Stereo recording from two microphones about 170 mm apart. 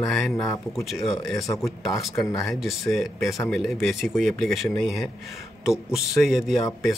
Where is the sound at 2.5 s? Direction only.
Centre (ahead or behind).